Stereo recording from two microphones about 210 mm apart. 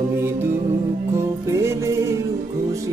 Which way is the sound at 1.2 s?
15° right (ahead or behind).